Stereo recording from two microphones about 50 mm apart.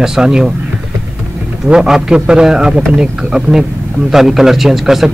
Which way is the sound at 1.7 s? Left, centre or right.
Centre.